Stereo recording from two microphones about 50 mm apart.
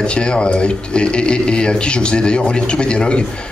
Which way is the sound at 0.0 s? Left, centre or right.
Centre.